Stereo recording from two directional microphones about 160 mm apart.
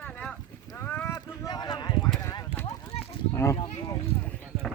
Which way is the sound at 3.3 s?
15° left (ahead or behind).